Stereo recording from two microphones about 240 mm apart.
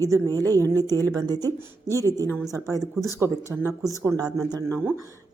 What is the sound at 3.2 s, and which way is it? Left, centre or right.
Speech, centre.